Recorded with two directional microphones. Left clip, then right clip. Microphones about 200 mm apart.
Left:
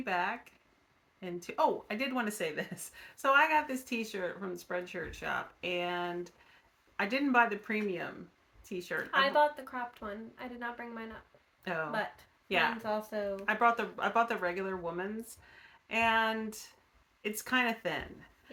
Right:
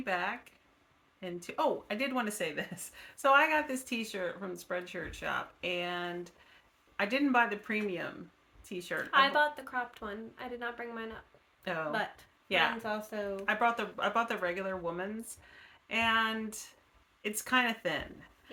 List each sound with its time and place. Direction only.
0.0 s speech: 5° left (ahead or behind)
9.0 s a woman's voice: 25° right (ahead or behind)
11.6 s speech: 5° left (ahead or behind)
11.9 s a woman's voice: 20° right (ahead or behind)
12.5 s speech: 5° left (ahead or behind)
12.8 s a woman's voice: 20° right (ahead or behind)
13.3 s speech: 5° left (ahead or behind)